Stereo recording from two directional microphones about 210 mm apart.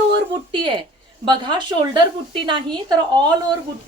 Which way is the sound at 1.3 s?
20° right (ahead or behind).